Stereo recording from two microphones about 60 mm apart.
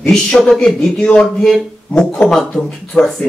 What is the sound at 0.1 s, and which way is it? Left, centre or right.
Speech, centre.